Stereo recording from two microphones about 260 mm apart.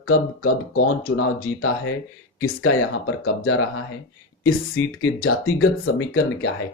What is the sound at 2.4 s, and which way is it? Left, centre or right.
Speech, left.